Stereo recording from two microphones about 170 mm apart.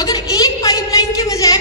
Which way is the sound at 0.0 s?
20° left (ahead or behind).